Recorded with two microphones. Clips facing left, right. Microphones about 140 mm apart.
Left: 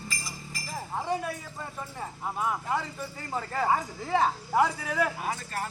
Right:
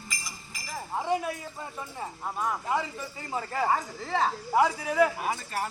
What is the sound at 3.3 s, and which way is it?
Speech, 5° right (ahead or behind).